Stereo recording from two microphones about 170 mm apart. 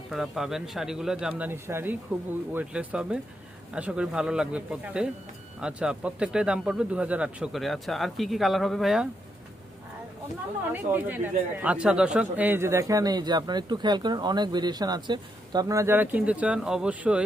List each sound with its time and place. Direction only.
0.1 s speech: centre (ahead or behind)
10.7 s speech: 10° right (ahead or behind)